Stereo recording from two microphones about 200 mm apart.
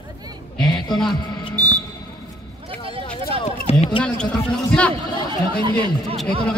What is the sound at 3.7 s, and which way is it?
Run, 30° left (ahead or behind).